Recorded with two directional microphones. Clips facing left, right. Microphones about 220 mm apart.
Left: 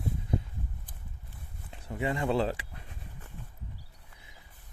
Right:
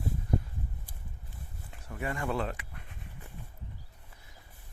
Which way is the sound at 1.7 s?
20° left (ahead or behind).